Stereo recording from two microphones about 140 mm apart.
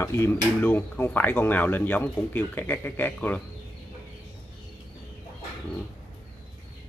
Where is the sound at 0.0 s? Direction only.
20° left (ahead or behind).